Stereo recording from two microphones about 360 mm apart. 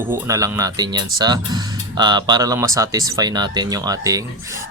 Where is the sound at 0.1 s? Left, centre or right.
Centre.